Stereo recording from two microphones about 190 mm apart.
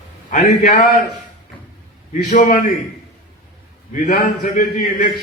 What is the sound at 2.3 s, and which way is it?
Speech, 40° left (ahead or behind).